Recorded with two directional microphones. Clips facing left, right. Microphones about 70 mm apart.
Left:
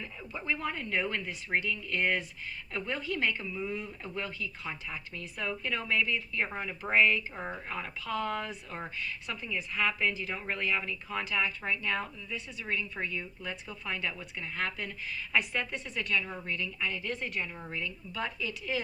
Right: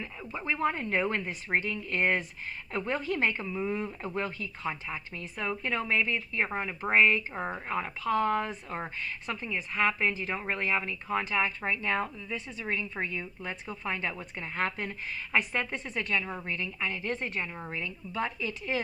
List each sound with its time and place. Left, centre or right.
0.0 s speech: right